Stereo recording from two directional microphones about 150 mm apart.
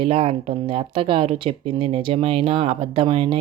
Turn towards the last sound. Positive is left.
turn(degrees=-35)  # may be behind; listen again after turning